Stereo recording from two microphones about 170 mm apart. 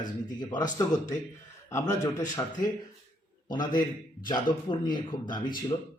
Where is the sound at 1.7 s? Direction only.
20° left (ahead or behind).